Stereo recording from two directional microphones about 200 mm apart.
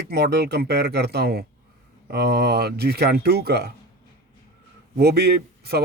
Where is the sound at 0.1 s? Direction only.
55° right (ahead or behind).